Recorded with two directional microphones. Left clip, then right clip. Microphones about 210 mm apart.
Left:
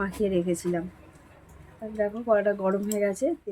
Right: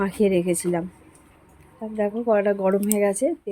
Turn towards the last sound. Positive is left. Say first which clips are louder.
# right 5 dB
turn(degrees=-40)  # may be behind; listen again after turning